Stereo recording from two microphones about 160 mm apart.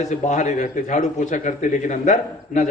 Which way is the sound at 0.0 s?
50° left (ahead or behind).